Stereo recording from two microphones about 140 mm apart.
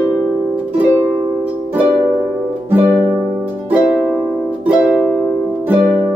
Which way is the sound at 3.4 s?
10° right (ahead or behind).